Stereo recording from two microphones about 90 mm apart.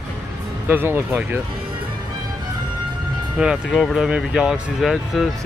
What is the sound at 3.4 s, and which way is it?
Speech, 5° right (ahead or behind).